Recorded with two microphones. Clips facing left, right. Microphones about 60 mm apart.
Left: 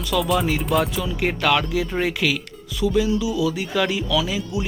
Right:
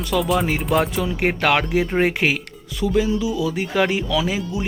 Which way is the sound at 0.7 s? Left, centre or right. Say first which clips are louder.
Right 3 dB; right.